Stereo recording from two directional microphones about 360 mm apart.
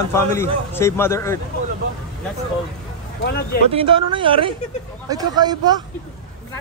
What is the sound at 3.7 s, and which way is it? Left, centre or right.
Speech, centre.